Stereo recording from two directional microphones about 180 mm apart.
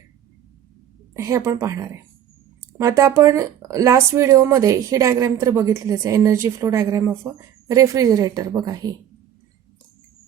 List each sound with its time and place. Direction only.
1.1 s a woman's voice: 15° right (ahead or behind)